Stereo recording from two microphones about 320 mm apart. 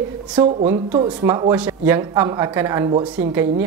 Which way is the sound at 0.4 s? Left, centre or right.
Right.